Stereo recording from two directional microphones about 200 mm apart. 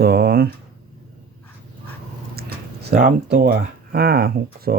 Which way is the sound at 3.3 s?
50° right (ahead or behind).